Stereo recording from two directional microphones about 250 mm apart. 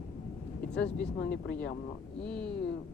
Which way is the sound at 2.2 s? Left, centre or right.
Centre.